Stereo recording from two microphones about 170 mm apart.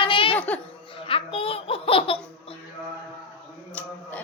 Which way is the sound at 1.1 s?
35° left (ahead or behind).